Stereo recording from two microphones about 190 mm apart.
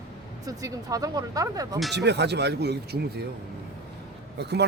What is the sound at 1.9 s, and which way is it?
Speech, 65° right (ahead or behind).